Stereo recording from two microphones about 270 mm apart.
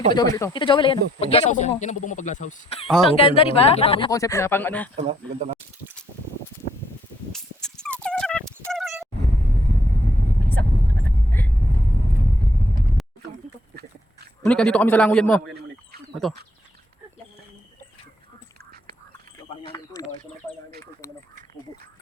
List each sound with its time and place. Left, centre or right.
0.1 s speech: centre
2.8 s a man's voice: centre
3.1 s speech: left
4.9 s speech: right
7.3 s a sound: centre
11.3 s vehicle: centre
13.0 s a sound: centre
14.4 s a man's voice: centre
19.7 s a sound: centre